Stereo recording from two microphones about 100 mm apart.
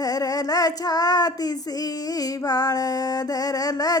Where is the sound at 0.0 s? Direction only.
40° left (ahead or behind).